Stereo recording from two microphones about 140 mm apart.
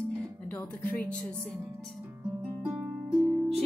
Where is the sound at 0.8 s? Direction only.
10° left (ahead or behind).